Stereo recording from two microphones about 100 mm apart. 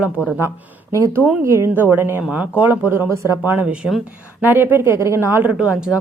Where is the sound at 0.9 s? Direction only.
30° right (ahead or behind); by 6.0 s 10° right (ahead or behind).